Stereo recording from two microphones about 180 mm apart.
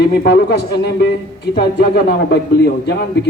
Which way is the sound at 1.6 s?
65° left (ahead or behind).